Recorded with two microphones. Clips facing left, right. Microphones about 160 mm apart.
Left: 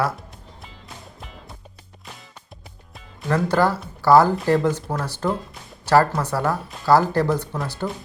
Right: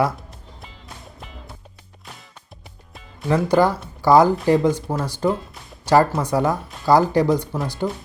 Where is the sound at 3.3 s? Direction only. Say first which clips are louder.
Right 2 dB; 15° right (ahead or behind).